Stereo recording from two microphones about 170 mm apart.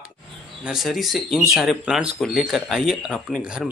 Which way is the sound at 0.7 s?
Centre (ahead or behind).